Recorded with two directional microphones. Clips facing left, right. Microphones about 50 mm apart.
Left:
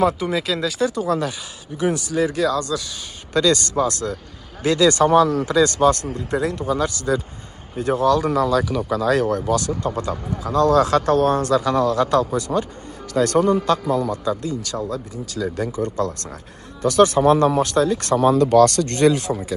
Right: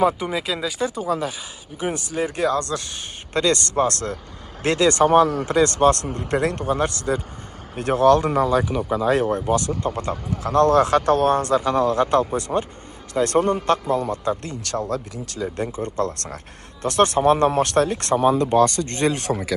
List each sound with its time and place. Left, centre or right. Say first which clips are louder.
0.0 s speech: left 1 dB; centre
1.8 s speech: left 4 dB; right
2.6 s a man's voice: left 2 dB; right
3.8 s speech: even; right
4.6 s a man's voice: left 1 dB; right
6.1 s speech: right 1 dB; right
6.6 s a man's voice: even; right
7.7 s speech: right 2 dB; right
8.2 s speech: left 1 dB; right
10.4 s a man's voice: even; right
14.4 s speech: left 2 dB; right
15.4 s a man's voice: left 2 dB; right
18.1 s speech: left 3 dB; centre
19.1 s speech: left 1 dB; right